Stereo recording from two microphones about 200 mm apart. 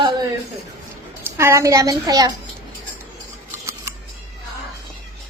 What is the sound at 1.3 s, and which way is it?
A woman's voice, 15° right (ahead or behind).